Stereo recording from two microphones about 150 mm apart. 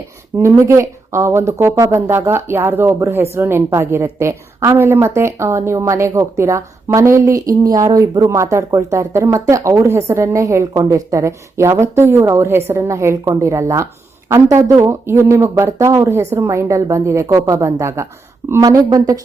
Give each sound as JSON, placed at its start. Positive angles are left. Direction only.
{"t": 0.3, "sound": "a woman's voice", "side_deg": -20}